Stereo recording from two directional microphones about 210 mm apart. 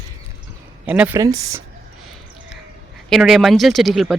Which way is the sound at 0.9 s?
10° right (ahead or behind).